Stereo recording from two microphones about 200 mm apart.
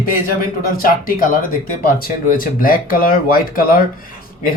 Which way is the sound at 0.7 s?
45° left (ahead or behind).